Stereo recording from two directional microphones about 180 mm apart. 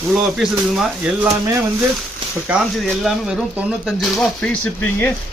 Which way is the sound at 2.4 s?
5° right (ahead or behind).